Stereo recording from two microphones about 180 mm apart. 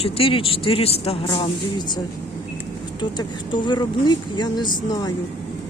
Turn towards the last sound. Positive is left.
turn(degrees=20)  # may be behind; listen again after turning